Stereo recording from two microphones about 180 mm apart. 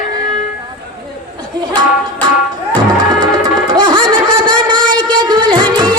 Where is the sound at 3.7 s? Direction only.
25° right (ahead or behind).